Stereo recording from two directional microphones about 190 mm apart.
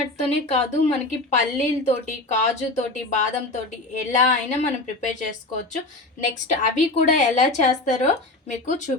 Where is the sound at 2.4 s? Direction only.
40° left (ahead or behind).